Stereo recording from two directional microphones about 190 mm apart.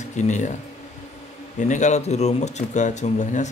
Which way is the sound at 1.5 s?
40° left (ahead or behind).